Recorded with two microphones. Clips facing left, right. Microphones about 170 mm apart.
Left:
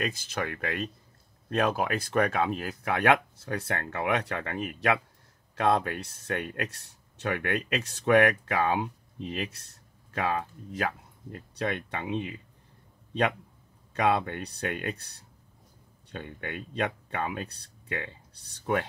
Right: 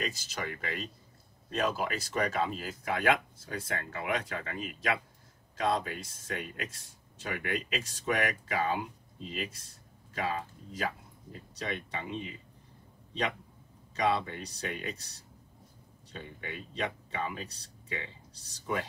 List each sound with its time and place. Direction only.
0.0 s speech: 55° left (ahead or behind)
10.1 s speech: 60° left (ahead or behind)
13.9 s speech: 55° left (ahead or behind)